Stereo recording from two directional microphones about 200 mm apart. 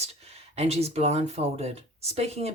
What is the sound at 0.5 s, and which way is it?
Speech, 30° right (ahead or behind).